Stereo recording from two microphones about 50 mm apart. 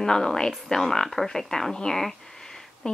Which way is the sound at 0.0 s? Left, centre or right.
Centre.